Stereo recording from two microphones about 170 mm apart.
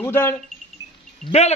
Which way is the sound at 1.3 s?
40° left (ahead or behind).